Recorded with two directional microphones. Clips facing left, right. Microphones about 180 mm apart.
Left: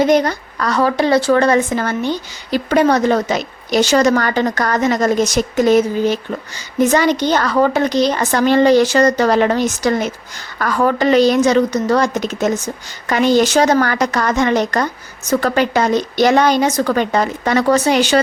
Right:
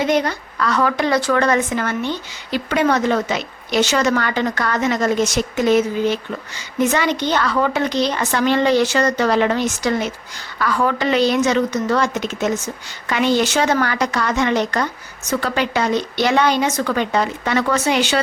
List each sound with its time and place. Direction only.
0.0 s a woman's voice: 40° left (ahead or behind)